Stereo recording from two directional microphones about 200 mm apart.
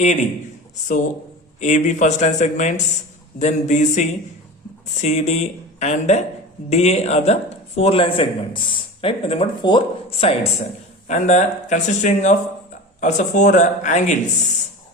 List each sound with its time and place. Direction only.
0.0 s speech: 35° left (ahead or behind)
1.6 s a man's voice: 35° left (ahead or behind)